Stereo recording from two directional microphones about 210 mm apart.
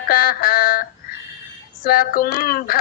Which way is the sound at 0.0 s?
45° left (ahead or behind).